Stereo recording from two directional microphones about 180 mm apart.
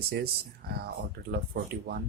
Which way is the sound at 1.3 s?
60° right (ahead or behind).